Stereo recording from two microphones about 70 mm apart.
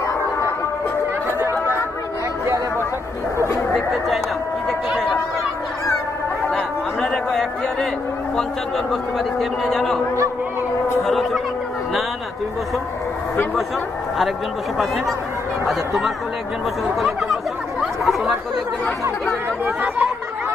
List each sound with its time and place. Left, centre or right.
3.7 s a man's voice: centre
4.6 s a sound: centre
6.5 s chatter: centre
9.4 s a man's voice: centre
11.1 s a man's voice: centre
15.6 s a man's voice: centre
17.0 s chatter: centre
19.6 s speech: right